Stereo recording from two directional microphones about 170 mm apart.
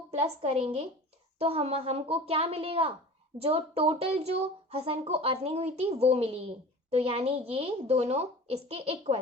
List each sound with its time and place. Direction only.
0.1 s speech: 35° right (ahead or behind)